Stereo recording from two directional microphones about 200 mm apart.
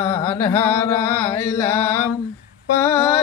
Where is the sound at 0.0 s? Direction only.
10° left (ahead or behind).